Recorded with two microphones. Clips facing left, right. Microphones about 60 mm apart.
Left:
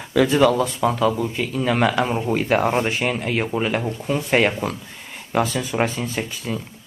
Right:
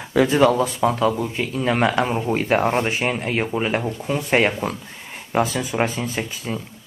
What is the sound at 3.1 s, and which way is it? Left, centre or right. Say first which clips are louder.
Speech: even; right.